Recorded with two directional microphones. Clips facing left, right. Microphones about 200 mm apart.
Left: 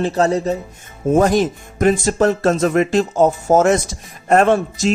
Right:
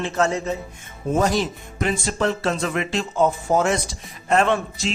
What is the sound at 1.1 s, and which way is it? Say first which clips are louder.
Speech: left 6 dB; 55° left (ahead or behind).